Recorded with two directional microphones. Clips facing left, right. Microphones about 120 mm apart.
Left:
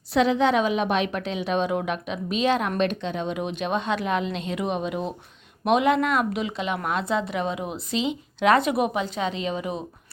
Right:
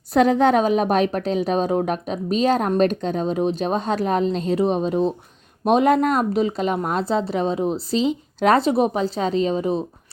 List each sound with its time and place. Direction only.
0.1 s a woman's voice: 45° right (ahead or behind)